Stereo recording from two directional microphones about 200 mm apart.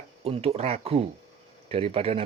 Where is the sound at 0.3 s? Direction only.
30° right (ahead or behind).